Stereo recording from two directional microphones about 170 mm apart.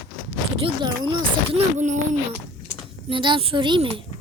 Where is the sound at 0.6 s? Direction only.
25° right (ahead or behind).